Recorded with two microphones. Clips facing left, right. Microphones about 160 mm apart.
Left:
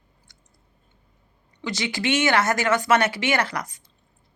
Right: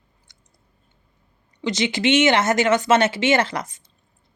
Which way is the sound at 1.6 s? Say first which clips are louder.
Right 5 dB; 20° right (ahead or behind).